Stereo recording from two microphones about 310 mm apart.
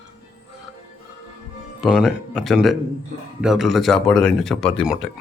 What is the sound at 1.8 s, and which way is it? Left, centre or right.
Speech, centre.